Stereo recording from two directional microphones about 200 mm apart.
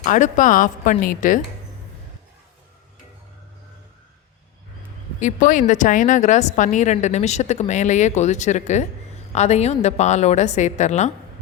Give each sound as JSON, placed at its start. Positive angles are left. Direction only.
{"t": 0.0, "sound": "a woman's voice", "side_deg": 40}
{"t": 5.2, "sound": "a woman's voice", "side_deg": 40}